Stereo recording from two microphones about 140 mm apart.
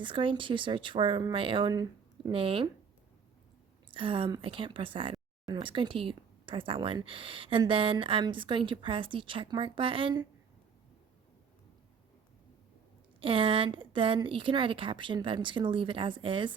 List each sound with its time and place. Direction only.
0.0 s speech: 35° right (ahead or behind)
2.3 s speech: 40° right (ahead or behind)
3.9 s speech: 35° right (ahead or behind)
13.1 s speech: 40° right (ahead or behind)